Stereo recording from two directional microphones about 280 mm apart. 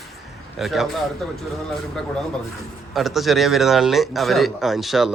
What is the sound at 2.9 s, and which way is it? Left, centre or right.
Speech, centre.